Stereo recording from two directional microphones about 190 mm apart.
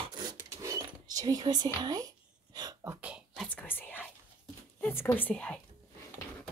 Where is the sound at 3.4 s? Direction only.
10° left (ahead or behind).